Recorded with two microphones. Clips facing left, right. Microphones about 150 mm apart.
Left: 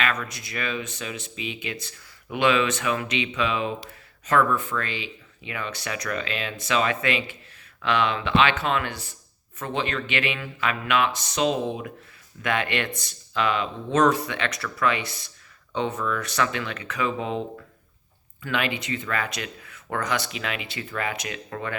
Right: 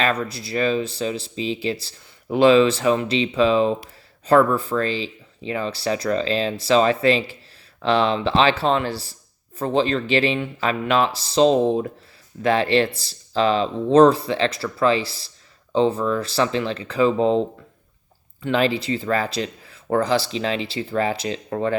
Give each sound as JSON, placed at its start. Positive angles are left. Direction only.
{"t": 0.0, "sound": "speech", "side_deg": -30}
{"t": 18.4, "sound": "speech", "side_deg": -35}